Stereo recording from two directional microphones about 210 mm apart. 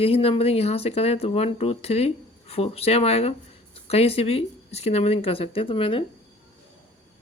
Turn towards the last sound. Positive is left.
turn(degrees=25)  # may be behind; listen again after turning